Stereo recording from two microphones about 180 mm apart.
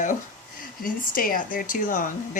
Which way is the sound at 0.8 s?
50° left (ahead or behind).